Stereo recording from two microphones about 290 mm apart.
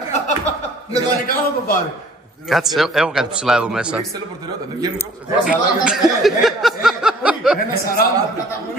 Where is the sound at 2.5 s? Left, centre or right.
Centre.